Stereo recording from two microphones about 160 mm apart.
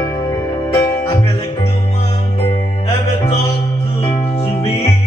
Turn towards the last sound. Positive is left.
turn(degrees=35)  # may be behind; listen again after turning